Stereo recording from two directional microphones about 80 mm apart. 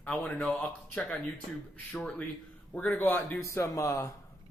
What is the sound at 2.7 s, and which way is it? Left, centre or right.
Speech, left.